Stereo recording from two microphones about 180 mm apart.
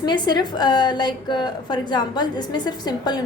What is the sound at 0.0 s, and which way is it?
A woman's voice, 25° left (ahead or behind).